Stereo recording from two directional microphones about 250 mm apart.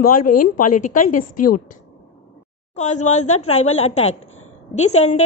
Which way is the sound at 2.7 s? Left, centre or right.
Left.